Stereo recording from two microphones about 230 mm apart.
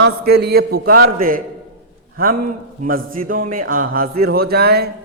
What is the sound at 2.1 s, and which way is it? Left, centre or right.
A man's voice, right.